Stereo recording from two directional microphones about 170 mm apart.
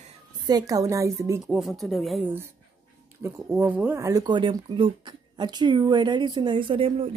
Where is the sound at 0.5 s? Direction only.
20° right (ahead or behind).